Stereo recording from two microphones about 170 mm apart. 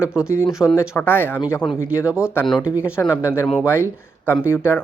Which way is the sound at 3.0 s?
20° left (ahead or behind).